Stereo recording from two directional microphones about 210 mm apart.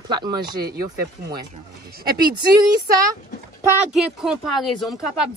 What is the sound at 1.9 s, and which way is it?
Speech, 45° right (ahead or behind).